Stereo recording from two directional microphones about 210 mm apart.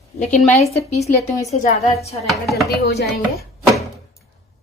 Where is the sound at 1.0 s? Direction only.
15° left (ahead or behind).